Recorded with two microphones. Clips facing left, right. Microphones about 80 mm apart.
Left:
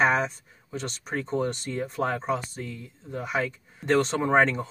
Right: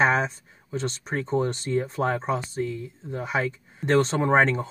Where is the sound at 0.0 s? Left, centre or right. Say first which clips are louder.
Right 1 dB; right.